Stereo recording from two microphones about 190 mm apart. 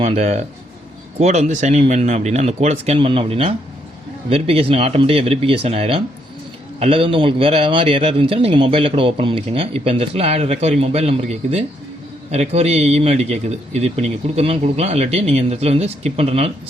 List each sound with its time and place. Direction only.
0.0 s a man's voice: 35° right (ahead or behind)